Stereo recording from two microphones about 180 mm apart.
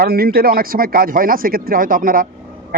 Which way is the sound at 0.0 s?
55° right (ahead or behind).